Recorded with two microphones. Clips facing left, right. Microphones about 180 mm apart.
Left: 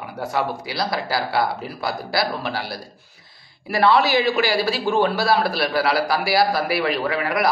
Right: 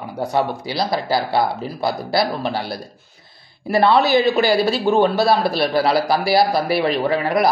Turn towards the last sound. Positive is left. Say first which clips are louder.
# right 4 dB
turn(degrees=-30)  # may be behind; listen again after turning